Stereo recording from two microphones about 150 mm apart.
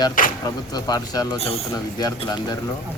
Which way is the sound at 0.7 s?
25° left (ahead or behind).